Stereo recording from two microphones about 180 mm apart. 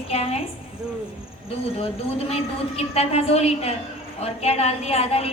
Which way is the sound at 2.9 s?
35° left (ahead or behind).